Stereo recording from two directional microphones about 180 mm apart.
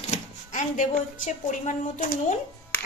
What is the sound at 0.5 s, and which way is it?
A woman's voice, 45° left (ahead or behind).